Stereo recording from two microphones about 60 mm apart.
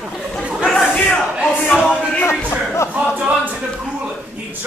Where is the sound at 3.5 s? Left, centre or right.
Centre.